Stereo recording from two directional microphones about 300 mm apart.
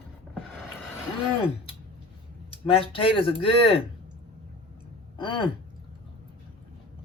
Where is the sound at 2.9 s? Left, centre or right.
Centre.